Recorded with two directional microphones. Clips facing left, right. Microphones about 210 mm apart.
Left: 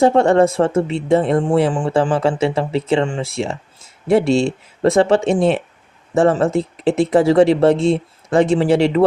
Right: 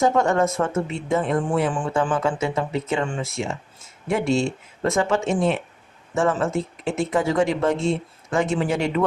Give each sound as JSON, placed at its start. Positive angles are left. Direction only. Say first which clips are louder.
{"t": 0.0, "sound": "speech", "louder": "left 7 dB", "side_deg": 30}